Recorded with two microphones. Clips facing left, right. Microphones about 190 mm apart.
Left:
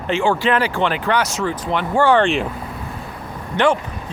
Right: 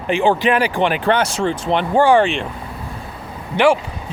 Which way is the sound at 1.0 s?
30° right (ahead or behind).